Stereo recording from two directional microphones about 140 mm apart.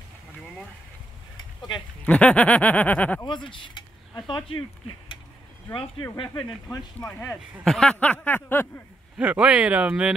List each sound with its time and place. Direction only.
2.0 s speech: 10° left (ahead or behind)
3.3 s speech: 35° left (ahead or behind)
7.1 s speech: 15° left (ahead or behind)
7.6 s speech: 5° left (ahead or behind)
9.2 s speech: 10° right (ahead or behind)